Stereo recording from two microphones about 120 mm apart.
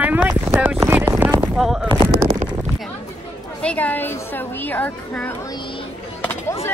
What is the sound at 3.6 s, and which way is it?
A woman's voice, 10° left (ahead or behind).